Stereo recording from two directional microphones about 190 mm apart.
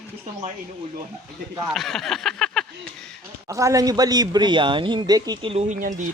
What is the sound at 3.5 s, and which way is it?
Speech, 15° right (ahead or behind).